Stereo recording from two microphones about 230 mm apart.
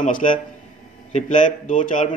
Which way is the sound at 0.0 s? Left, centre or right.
Left.